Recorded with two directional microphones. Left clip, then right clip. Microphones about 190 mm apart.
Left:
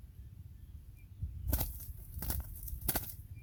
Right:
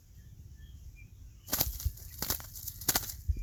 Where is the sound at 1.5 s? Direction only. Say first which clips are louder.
Right 8 dB; 10° left (ahead or behind).